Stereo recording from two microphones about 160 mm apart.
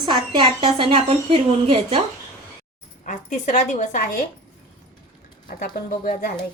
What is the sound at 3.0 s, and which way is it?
A woman's voice, 50° left (ahead or behind).